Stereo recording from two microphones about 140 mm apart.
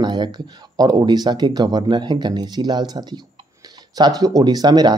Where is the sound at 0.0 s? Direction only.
30° right (ahead or behind).